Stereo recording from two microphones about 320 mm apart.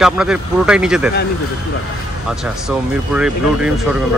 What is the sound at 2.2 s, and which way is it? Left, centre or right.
Speech, centre.